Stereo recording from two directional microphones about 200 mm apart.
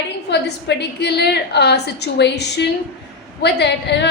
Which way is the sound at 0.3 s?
60° left (ahead or behind).